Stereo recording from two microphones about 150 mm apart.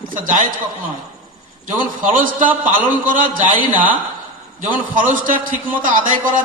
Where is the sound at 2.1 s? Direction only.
65° right (ahead or behind).